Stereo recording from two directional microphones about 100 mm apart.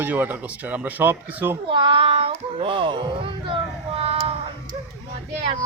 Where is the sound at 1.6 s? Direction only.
55° right (ahead or behind).